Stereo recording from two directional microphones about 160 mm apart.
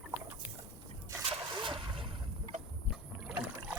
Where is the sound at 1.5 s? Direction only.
30° right (ahead or behind).